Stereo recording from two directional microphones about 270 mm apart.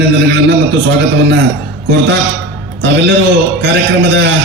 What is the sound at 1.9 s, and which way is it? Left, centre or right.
Speech, right.